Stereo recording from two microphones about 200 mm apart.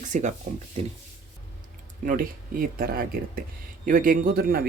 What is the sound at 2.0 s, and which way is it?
Speech, 45° right (ahead or behind).